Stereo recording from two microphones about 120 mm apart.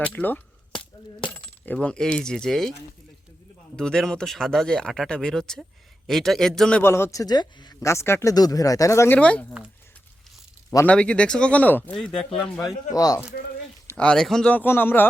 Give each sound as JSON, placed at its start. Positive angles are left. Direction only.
{"t": 0.0, "sound": "speech", "side_deg": 15}
{"t": 1.6, "sound": "speech", "side_deg": 10}
{"t": 3.8, "sound": "speech", "side_deg": 5}
{"t": 6.8, "sound": "speech", "side_deg": 20}
{"t": 7.8, "sound": "speech", "side_deg": 25}
{"t": 9.1, "sound": "speech", "side_deg": 10}
{"t": 10.8, "sound": "speech", "side_deg": 10}
{"t": 12.9, "sound": "speech", "side_deg": 30}
{"t": 13.9, "sound": "speech", "side_deg": 10}